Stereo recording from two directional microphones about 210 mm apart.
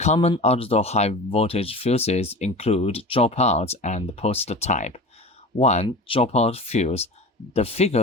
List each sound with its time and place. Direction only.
0.0 s speech: 30° left (ahead or behind)